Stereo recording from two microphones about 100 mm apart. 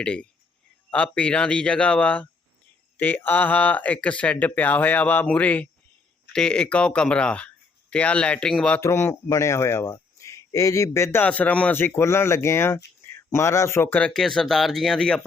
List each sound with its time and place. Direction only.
0.0 s speech: 10° left (ahead or behind)
8.8 s speech: 25° left (ahead or behind)
11.2 s speech: 15° left (ahead or behind)
13.9 s speech: 10° left (ahead or behind)